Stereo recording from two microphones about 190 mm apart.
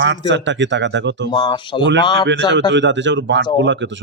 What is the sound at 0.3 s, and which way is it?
Speech, 70° right (ahead or behind).